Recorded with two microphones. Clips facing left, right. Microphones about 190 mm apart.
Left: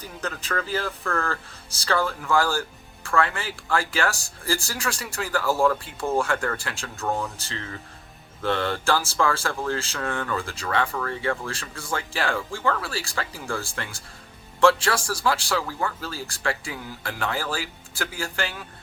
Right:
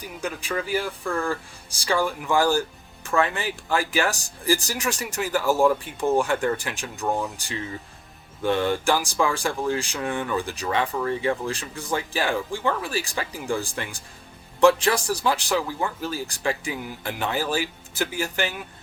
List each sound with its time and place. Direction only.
0.0 s speech: 10° right (ahead or behind)